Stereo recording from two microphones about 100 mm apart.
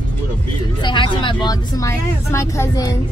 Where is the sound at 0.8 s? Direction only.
55° left (ahead or behind).